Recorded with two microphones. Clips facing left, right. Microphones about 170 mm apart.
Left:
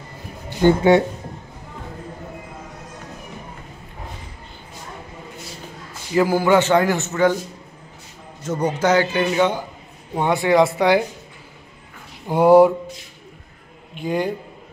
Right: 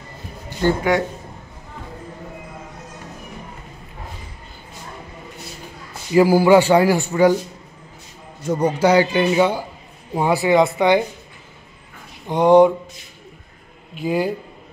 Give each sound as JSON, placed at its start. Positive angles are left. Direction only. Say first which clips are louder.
{"t": 0.6, "sound": "speech", "louder": "left 4 dB", "side_deg": 25}
{"t": 6.1, "sound": "speech", "louder": "right 4 dB", "side_deg": -10}
{"t": 8.5, "sound": "speech", "louder": "right 3 dB", "side_deg": -10}
{"t": 12.3, "sound": "speech", "louder": "even", "side_deg": 5}
{"t": 13.9, "sound": "speech", "louder": "right 2 dB", "side_deg": -5}